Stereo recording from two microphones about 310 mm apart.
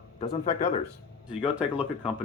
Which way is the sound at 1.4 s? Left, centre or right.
Centre.